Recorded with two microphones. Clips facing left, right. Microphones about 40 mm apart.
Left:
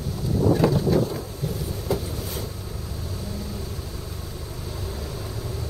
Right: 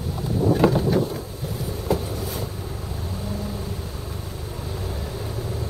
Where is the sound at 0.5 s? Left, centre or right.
Right.